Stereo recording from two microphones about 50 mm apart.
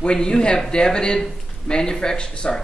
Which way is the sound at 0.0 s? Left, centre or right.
Centre.